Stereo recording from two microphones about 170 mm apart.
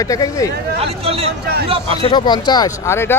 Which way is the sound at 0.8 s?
35° right (ahead or behind).